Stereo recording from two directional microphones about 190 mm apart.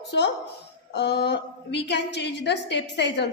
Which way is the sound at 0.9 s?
65° left (ahead or behind).